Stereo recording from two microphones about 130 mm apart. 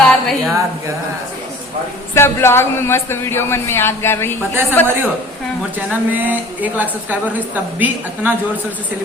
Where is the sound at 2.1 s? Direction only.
20° left (ahead or behind).